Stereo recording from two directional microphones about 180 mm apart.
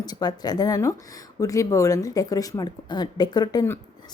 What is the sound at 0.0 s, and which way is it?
Speech, 20° left (ahead or behind).